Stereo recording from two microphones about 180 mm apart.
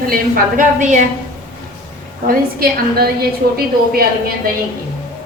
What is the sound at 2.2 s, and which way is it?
A woman's voice, 55° right (ahead or behind).